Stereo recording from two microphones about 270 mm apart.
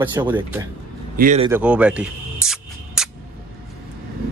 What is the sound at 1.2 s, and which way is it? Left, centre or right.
Speech, right.